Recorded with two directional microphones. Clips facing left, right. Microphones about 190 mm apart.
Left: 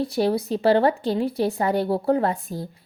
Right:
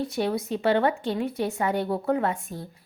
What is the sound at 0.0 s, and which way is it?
Speech, 35° left (ahead or behind).